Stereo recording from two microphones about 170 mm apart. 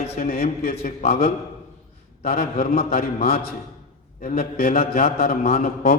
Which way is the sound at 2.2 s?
60° left (ahead or behind).